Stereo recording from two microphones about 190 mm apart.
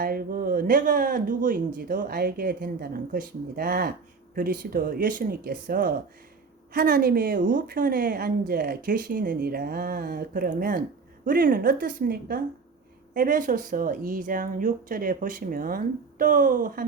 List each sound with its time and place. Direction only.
0.0 s a woman's voice: 50° right (ahead or behind)